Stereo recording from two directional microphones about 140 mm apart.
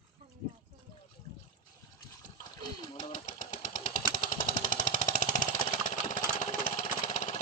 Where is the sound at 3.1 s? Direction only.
65° left (ahead or behind).